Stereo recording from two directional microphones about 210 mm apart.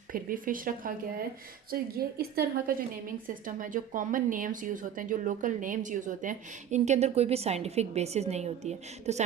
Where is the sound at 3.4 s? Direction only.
40° right (ahead or behind).